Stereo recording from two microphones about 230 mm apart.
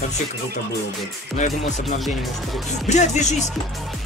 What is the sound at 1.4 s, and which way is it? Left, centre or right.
Speech, left.